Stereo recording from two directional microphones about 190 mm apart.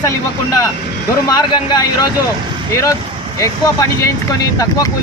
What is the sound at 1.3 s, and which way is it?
Speech, 20° left (ahead or behind).